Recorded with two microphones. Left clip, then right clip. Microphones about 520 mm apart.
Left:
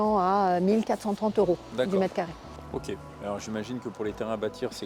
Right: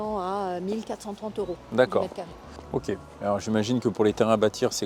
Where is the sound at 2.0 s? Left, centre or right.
Left.